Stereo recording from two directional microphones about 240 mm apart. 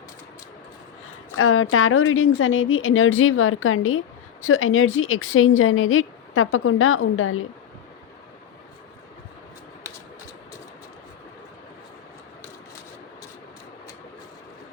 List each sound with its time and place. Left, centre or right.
1.4 s a woman's voice: left